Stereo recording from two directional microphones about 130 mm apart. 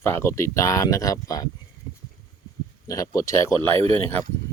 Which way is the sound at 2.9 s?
25° left (ahead or behind).